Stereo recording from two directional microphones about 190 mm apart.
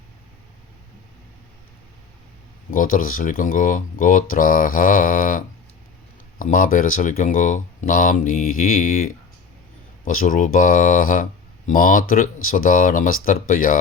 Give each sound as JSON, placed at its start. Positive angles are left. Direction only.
{"t": 2.6, "sound": "speech", "side_deg": 45}
{"t": 10.1, "sound": "speech", "side_deg": 45}